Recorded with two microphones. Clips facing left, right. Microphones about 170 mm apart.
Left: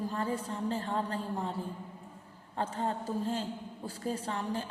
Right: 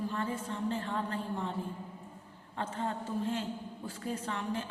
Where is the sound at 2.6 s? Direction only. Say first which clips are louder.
Left 2 dB; 35° left (ahead or behind).